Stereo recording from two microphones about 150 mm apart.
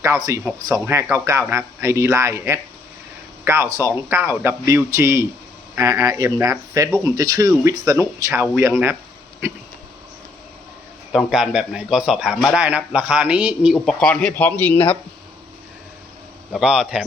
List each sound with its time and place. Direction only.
0.0 s a man's voice: 20° right (ahead or behind)
11.1 s a man's voice: 5° right (ahead or behind)
13.8 s speech: 5° left (ahead or behind)
16.5 s speech: centre (ahead or behind)